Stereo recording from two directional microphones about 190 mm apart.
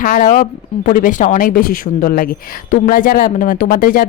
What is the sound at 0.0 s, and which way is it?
Speech, 45° left (ahead or behind).